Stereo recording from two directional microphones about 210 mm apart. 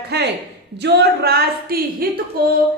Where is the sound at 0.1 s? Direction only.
50° right (ahead or behind).